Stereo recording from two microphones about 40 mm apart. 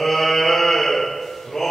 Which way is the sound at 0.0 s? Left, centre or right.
Centre.